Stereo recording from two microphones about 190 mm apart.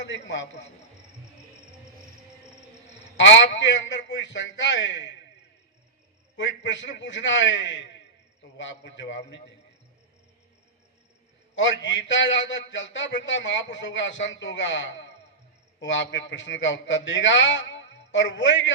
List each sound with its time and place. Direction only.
0.0 s a man's voice: 70° left (ahead or behind)
3.2 s a man's voice: 70° left (ahead or behind)
6.3 s a man's voice: 70° left (ahead or behind)
11.5 s a man's voice: 75° left (ahead or behind)